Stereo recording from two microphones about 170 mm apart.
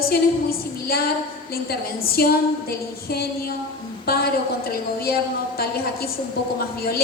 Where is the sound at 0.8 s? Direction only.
65° left (ahead or behind).